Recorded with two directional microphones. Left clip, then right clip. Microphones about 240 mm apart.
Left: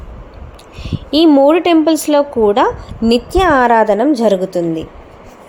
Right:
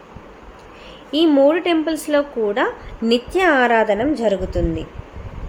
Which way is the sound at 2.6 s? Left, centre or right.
Centre.